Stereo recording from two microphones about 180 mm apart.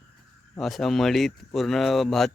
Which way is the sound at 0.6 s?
Centre (ahead or behind).